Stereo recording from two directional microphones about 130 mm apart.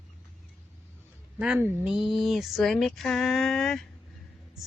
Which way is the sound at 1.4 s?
10° right (ahead or behind).